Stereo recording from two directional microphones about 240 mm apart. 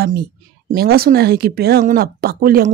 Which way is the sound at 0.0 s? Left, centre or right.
Right.